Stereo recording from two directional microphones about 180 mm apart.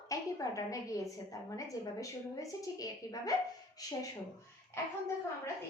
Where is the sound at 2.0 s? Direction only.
20° left (ahead or behind).